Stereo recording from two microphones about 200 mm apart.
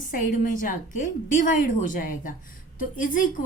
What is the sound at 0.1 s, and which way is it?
A woman's voice, 40° left (ahead or behind).